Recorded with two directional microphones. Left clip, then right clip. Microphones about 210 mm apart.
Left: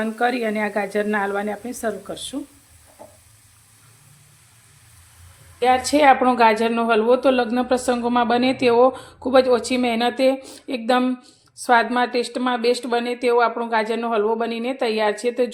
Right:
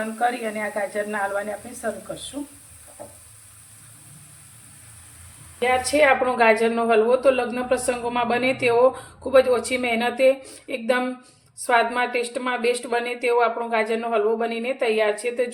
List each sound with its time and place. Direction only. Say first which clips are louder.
0.0 s speech: left 3 dB; 55° left (ahead or behind)
5.5 s a woman's voice: left 2 dB; 40° left (ahead or behind)